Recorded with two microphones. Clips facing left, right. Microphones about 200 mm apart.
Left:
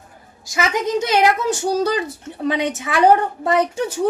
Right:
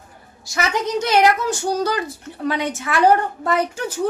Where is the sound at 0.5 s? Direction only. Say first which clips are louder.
Left 2 dB; 20° left (ahead or behind).